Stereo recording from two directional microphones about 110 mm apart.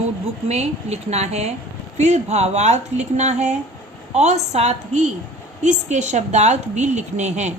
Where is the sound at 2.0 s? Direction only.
90° right.